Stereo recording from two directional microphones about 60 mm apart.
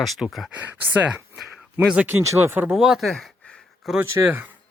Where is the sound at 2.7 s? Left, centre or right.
Centre.